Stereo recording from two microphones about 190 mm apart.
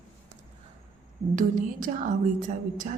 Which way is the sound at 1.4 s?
45° right (ahead or behind).